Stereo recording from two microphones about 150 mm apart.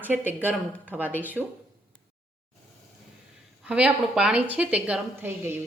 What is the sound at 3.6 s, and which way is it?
Speech, 10° right (ahead or behind).